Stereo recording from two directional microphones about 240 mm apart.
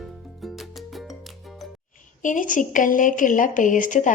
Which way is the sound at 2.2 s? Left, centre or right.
Left.